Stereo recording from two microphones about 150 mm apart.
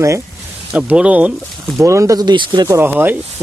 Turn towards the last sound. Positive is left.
turn(degrees=-10)  # may be behind; listen again after turning